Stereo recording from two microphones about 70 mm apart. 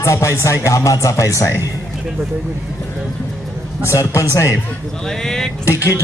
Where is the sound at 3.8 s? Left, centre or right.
Left.